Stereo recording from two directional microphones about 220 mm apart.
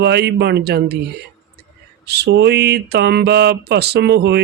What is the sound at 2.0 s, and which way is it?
Mantra, 50° right (ahead or behind).